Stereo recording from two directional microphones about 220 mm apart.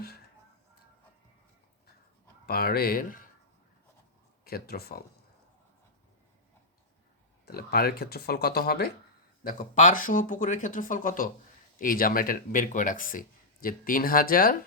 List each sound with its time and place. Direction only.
2.5 s speech: 45° left (ahead or behind)
4.4 s speech: 45° left (ahead or behind)
7.4 s speech: 45° left (ahead or behind)